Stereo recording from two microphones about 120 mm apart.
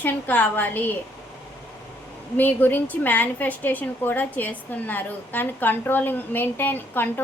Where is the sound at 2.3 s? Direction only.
15° left (ahead or behind).